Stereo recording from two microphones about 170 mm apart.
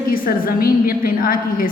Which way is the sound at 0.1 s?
60° left (ahead or behind).